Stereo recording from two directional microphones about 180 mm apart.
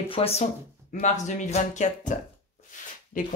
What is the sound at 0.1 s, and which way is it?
Speech, 35° left (ahead or behind).